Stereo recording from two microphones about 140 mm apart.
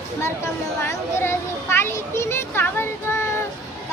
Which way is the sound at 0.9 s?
20° left (ahead or behind).